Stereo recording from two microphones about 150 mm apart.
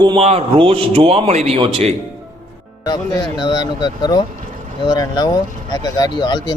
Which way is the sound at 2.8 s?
25° left (ahead or behind).